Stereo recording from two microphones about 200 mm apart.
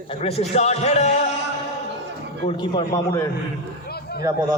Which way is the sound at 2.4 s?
25° left (ahead or behind).